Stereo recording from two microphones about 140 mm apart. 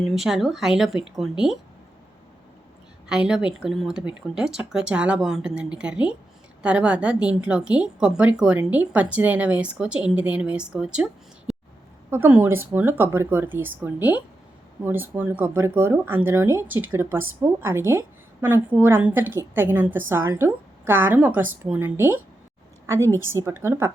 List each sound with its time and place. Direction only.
0.0 s speech: centre (ahead or behind)
3.1 s a woman's voice: 5° right (ahead or behind)